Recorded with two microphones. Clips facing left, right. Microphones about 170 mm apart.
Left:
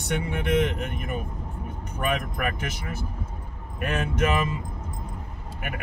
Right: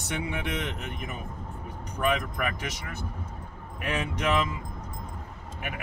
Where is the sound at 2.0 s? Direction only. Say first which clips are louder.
Even; centre (ahead or behind).